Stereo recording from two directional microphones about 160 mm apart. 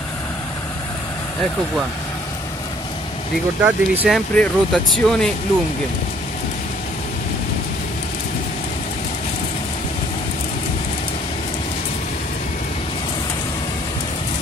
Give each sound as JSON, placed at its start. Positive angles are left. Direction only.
{"t": 3.6, "sound": "speech", "side_deg": -10}
{"t": 4.1, "sound": "speech", "side_deg": 5}